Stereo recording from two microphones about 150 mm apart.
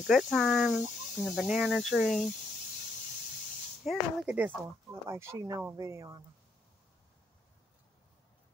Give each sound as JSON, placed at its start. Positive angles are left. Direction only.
{"t": 0.0, "sound": "speech", "side_deg": 0}
{"t": 3.8, "sound": "speech", "side_deg": -5}
{"t": 5.0, "sound": "speech", "side_deg": -15}